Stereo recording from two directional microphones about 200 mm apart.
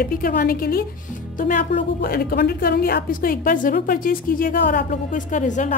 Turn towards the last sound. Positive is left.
turn(degrees=40)  # may be behind; listen again after turning